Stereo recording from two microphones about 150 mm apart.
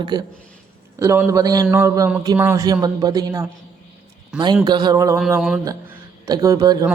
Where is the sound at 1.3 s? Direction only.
25° right (ahead or behind).